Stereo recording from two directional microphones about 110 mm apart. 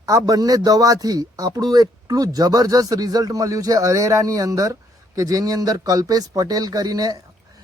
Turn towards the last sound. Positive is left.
turn(degrees=-35)  # may be behind; listen again after turning